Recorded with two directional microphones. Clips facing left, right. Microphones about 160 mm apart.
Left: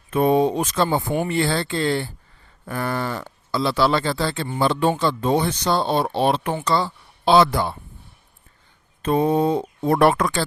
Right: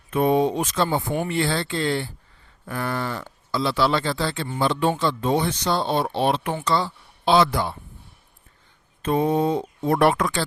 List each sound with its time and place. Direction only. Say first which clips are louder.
0.1 s speech: left 2 dB; 40° left (ahead or behind)
9.0 s speech: left 2 dB; 35° left (ahead or behind)